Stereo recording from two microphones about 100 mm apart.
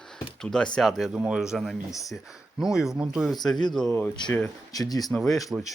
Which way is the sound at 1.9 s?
35° left (ahead or behind).